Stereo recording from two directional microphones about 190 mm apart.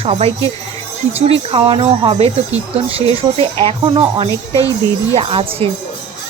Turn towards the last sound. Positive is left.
turn(degrees=-30)  # may be behind; listen again after turning